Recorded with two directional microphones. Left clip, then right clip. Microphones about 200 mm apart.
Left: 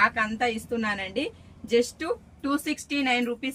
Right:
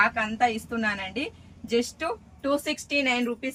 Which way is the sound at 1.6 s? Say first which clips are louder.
Left 2 dB; 30° right (ahead or behind).